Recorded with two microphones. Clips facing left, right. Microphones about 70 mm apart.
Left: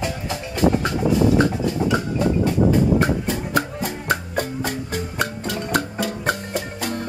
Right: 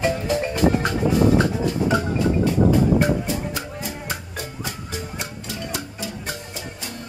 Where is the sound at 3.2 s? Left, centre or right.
Left.